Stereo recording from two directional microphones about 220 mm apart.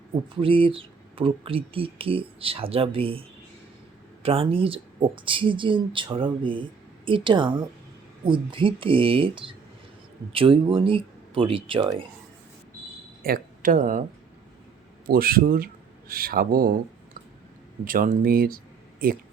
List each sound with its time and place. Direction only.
0.3 s speech: 25° right (ahead or behind)
13.2 s speech: 40° right (ahead or behind)
15.0 s speech: 40° right (ahead or behind)
17.8 s speech: 40° right (ahead or behind)